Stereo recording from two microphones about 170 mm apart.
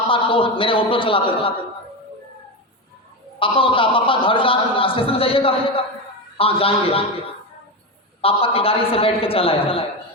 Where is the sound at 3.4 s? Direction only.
30° left (ahead or behind).